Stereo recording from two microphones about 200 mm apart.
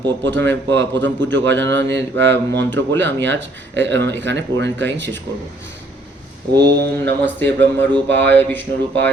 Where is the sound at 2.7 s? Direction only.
65° right (ahead or behind).